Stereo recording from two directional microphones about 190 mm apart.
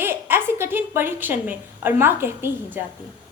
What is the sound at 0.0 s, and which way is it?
A woman's voice, 10° right (ahead or behind).